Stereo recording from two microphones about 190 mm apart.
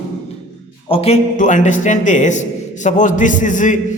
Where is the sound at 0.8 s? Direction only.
30° left (ahead or behind).